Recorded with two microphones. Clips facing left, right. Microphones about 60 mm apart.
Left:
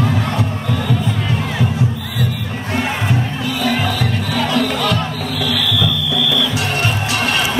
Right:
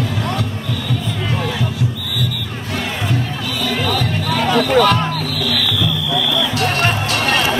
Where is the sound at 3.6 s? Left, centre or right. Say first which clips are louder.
Left 3 dB; left.